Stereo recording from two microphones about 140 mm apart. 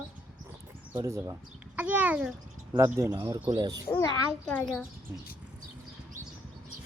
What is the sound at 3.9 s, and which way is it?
Speech, 25° left (ahead or behind).